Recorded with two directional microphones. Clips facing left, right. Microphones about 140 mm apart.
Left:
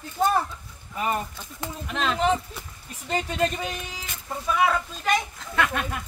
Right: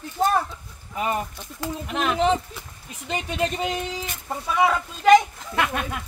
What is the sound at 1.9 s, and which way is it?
Speech, 15° right (ahead or behind).